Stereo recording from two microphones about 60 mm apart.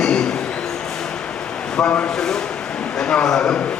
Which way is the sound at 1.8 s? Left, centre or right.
Centre.